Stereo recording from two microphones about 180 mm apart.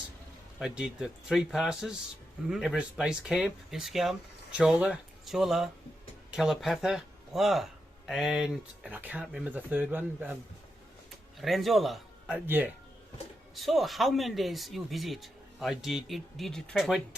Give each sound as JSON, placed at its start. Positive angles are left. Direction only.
{"t": 0.6, "sound": "speech", "side_deg": -5}
{"t": 11.3, "sound": "a man's voice", "side_deg": 0}
{"t": 13.6, "sound": "speech", "side_deg": 0}